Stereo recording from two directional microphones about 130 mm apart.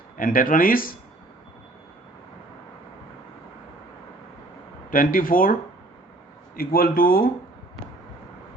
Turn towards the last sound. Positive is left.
turn(degrees=90)